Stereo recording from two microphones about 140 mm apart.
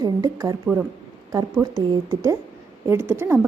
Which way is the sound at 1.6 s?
25° right (ahead or behind).